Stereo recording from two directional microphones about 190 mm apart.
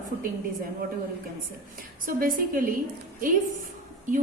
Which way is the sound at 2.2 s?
45° right (ahead or behind).